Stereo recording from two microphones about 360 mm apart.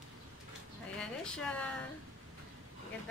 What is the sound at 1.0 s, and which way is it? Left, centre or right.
Speech, centre.